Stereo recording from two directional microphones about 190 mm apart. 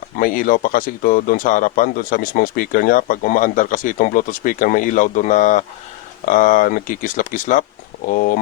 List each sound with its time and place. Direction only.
0.2 s speech: 45° left (ahead or behind)